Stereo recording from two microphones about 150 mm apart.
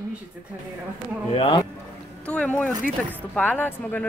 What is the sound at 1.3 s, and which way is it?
Speech, 35° left (ahead or behind).